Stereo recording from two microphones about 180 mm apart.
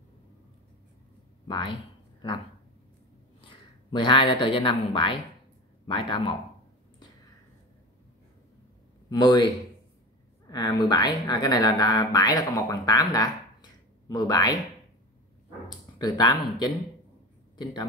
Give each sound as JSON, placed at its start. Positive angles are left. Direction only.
{"t": 1.5, "sound": "speech", "side_deg": 25}
{"t": 3.3, "sound": "speech", "side_deg": 30}
{"t": 9.1, "sound": "speech", "side_deg": 25}
{"t": 10.5, "sound": "speech", "side_deg": 25}
{"t": 16.0, "sound": "speech", "side_deg": 20}